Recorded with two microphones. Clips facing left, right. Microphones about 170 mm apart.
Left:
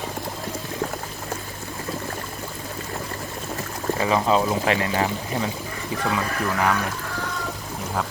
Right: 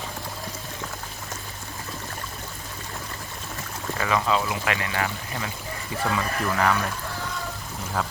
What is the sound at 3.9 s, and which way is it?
Speech, 30° left (ahead or behind).